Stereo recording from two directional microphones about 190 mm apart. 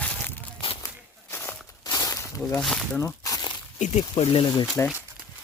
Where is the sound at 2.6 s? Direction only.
Centre (ahead or behind).